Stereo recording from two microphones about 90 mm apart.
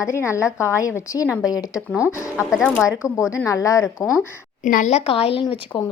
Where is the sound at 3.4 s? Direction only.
35° left (ahead or behind).